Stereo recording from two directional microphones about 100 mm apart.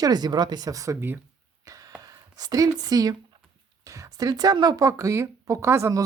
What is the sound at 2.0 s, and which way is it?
Speech, 40° right (ahead or behind).